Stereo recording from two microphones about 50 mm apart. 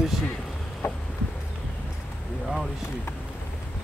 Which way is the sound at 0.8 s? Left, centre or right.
Left.